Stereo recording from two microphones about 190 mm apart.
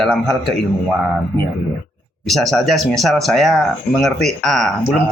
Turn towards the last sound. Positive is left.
turn(degrees=0)  # may be behind; listen again after turning